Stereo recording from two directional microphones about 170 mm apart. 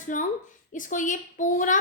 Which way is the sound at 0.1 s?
50° left (ahead or behind).